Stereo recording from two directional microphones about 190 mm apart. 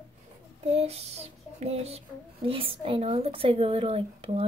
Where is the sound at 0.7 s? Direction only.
30° right (ahead or behind).